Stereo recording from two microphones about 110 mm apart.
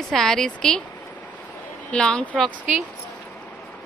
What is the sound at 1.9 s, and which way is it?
Speech, 10° left (ahead or behind).